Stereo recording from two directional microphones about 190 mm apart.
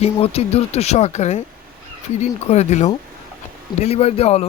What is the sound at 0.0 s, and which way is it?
A man's voice, 30° left (ahead or behind).